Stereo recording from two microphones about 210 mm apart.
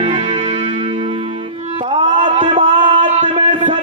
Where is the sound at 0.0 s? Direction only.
30° right (ahead or behind).